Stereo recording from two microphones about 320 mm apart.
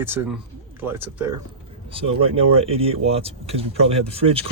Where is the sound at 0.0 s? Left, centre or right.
Centre.